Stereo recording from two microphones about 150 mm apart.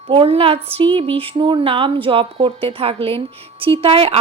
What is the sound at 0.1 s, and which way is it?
Speech, 40° right (ahead or behind).